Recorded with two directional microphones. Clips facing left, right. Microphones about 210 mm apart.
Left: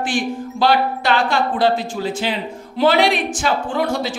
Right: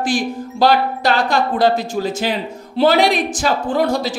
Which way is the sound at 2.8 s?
40° right (ahead or behind).